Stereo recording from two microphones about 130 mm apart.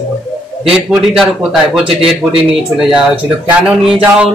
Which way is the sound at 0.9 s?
5° right (ahead or behind).